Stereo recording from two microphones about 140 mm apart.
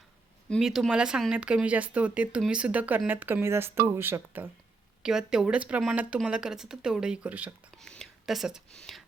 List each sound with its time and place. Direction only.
0.5 s speech: centre (ahead or behind)
5.0 s speech: 5° right (ahead or behind)
7.8 s speech: 5° left (ahead or behind)